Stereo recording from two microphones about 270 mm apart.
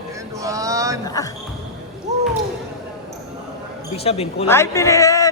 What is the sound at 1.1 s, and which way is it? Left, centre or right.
Speech, centre.